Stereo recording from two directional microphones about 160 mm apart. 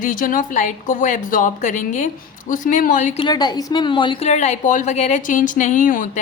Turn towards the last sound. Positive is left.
turn(degrees=55)  # may be behind; listen again after turning